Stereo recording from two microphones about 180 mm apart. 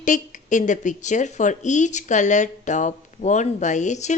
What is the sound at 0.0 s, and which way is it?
Speech, 45° left (ahead or behind).